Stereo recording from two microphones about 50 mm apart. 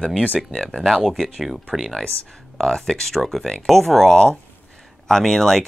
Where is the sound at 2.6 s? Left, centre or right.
Centre.